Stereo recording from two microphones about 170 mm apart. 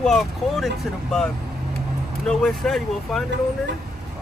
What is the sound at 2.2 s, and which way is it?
Speech, 5° left (ahead or behind).